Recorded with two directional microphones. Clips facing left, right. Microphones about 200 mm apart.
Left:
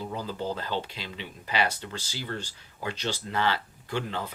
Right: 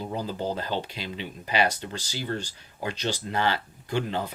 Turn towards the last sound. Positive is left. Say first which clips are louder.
# right 4 dB
turn(degrees=-15)  # may be behind; listen again after turning